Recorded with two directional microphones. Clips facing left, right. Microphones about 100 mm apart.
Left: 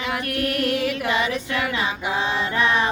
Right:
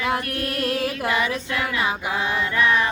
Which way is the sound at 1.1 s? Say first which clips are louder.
Left 1 dB; 25° left (ahead or behind).